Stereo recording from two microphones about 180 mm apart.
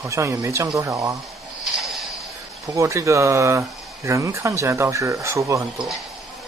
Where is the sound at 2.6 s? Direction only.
15° right (ahead or behind).